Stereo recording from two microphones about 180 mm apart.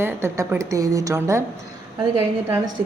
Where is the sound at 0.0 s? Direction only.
15° right (ahead or behind).